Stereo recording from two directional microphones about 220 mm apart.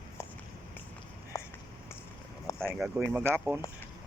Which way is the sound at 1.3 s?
15° left (ahead or behind).